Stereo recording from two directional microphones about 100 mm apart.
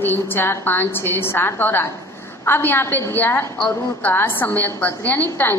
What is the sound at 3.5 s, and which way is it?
Speech, 5° left (ahead or behind).